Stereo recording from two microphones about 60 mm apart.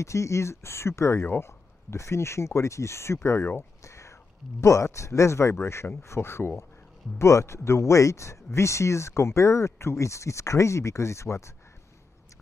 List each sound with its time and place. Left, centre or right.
0.0 s speech: left
3.8 s speech: left